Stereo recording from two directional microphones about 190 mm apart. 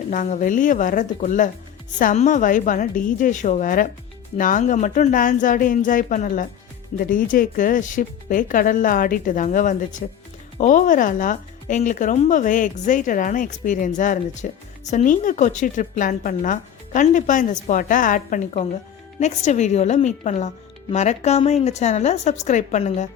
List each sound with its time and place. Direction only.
0.1 s a woman's voice: 40° left (ahead or behind)